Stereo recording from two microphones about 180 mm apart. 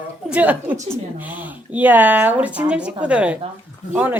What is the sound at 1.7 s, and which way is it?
A woman's voice, 10° right (ahead or behind).